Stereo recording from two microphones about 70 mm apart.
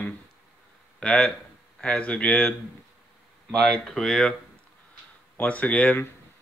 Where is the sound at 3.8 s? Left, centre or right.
Centre.